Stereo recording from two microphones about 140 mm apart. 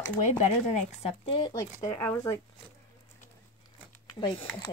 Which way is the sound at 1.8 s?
20° left (ahead or behind).